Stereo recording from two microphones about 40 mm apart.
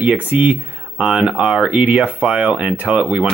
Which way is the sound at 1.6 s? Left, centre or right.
Right.